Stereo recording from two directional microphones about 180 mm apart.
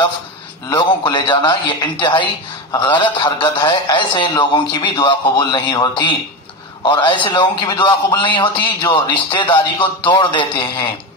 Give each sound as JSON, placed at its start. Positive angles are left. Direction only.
{"t": 0.7, "sound": "a man's voice", "side_deg": 25}